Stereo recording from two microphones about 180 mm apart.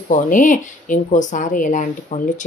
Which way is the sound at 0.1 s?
45° left (ahead or behind).